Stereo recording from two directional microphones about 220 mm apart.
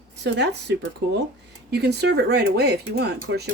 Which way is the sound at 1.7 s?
50° right (ahead or behind).